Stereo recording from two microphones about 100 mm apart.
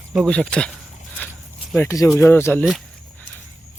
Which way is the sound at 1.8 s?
35° left (ahead or behind).